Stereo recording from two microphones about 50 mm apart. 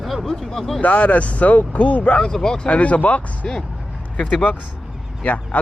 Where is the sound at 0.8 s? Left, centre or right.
Left.